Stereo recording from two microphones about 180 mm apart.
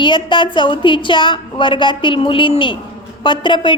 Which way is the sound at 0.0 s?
25° left (ahead or behind).